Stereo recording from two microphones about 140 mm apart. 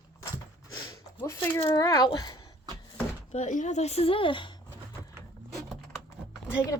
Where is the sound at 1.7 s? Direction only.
25° left (ahead or behind).